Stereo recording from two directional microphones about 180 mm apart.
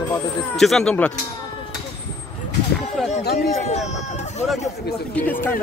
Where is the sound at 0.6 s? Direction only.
5° left (ahead or behind).